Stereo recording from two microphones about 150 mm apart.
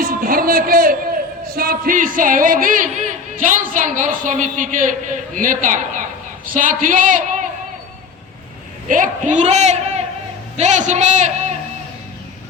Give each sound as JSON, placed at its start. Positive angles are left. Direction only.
{"t": 0.0, "sound": "speech", "side_deg": -70}
{"t": 8.9, "sound": "a man's voice", "side_deg": -55}